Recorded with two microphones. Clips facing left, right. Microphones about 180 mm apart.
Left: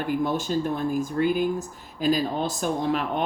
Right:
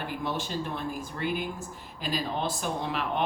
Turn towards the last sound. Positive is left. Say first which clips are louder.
# left 5 dB
turn(degrees=45)  # may be behind; listen again after turning